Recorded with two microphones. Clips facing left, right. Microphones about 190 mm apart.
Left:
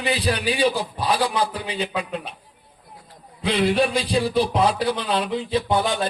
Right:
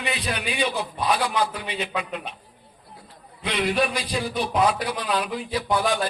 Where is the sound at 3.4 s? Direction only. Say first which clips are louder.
Left 4 dB; 30° left (ahead or behind).